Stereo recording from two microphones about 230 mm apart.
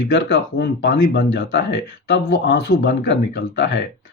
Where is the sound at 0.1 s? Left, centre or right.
Left.